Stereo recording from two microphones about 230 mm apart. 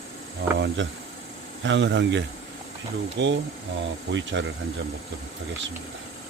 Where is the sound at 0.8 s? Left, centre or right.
Right.